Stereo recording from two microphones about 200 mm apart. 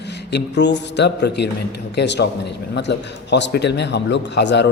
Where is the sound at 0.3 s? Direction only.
60° left (ahead or behind).